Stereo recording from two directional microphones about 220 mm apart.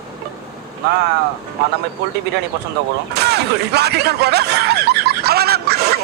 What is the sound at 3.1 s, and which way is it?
Speech, 45° right (ahead or behind).